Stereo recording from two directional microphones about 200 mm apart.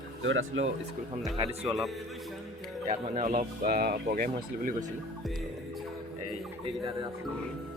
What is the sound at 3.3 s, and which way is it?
Speech, 45° right (ahead or behind).